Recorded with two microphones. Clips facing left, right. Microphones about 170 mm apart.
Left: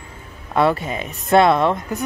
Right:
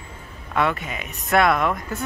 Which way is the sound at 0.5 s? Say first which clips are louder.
Left 5 dB; 35° left (ahead or behind).